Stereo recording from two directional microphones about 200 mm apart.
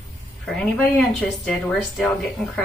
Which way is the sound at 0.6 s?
5° left (ahead or behind).